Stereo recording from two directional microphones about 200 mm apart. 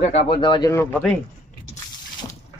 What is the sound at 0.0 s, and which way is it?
Speech, 30° left (ahead or behind).